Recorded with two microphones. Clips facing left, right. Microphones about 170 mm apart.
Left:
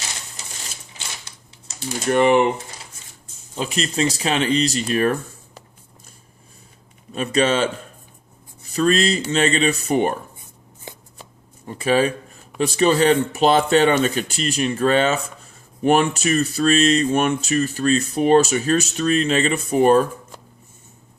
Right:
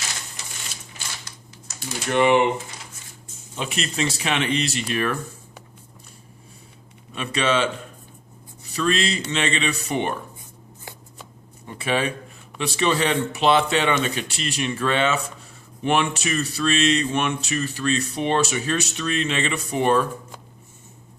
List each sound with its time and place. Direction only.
1.7 s typing: 25° left (ahead or behind)
2.1 s speech: 40° left (ahead or behind)
3.5 s speech: 35° left (ahead or behind)
7.1 s speech: 40° left (ahead or behind)
8.7 s speech: 40° left (ahead or behind)
11.6 s speech: 40° left (ahead or behind)